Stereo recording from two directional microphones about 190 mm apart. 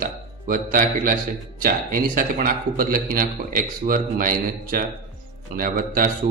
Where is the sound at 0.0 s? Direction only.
50° right (ahead or behind).